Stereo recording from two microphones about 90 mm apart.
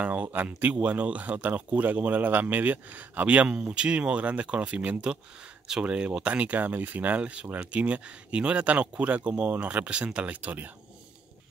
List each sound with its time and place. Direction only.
0.0 s speech: 15° right (ahead or behind)